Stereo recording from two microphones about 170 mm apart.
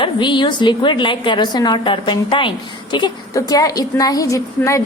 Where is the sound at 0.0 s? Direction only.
30° left (ahead or behind).